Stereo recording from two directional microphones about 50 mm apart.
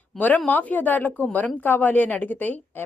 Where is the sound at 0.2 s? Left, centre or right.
Left.